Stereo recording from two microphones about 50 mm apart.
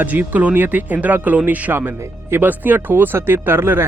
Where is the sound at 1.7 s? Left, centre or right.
Right.